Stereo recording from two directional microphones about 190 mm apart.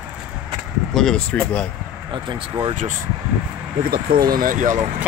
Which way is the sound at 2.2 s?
25° right (ahead or behind).